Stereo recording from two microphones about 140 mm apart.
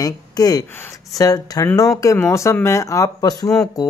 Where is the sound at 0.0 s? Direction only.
25° left (ahead or behind).